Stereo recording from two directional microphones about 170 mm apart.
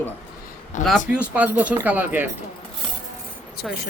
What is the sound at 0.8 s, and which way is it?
Speech, 45° left (ahead or behind).